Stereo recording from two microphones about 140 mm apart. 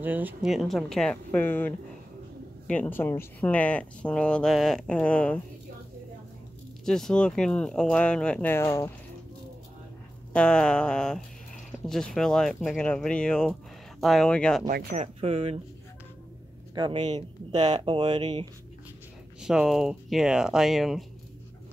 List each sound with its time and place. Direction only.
0.0 s speech: 10° right (ahead or behind)
0.5 s speech: centre (ahead or behind)
6.8 s speech: 5° left (ahead or behind); by 8.9 s 20° left (ahead or behind)
10.3 s speech: 5° left (ahead or behind)
14.7 s speech: 90° right
15.0 s speech: 45° right (ahead or behind)
16.7 s speech: 35° right (ahead or behind)
17.1 s speech: 50° right (ahead or behind)
17.7 s speech: 35° right (ahead or behind)
19.4 s speech: 5° right (ahead or behind)